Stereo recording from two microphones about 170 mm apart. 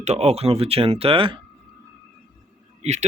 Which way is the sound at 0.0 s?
40° right (ahead or behind).